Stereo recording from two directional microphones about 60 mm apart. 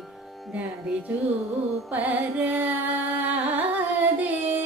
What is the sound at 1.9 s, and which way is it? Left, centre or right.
Music, right.